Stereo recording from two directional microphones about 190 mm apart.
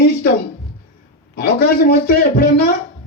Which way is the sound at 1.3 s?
55° left (ahead or behind).